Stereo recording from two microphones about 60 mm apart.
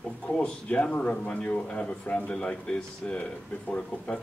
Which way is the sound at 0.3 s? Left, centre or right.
Centre.